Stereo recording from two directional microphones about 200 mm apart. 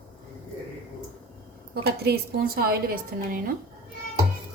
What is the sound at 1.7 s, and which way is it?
A woman's voice, 55° right (ahead or behind).